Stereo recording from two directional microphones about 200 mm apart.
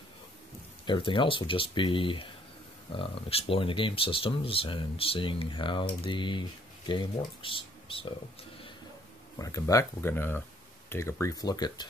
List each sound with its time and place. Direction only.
0.8 s speech: 25° left (ahead or behind)
9.4 s speech: 15° left (ahead or behind)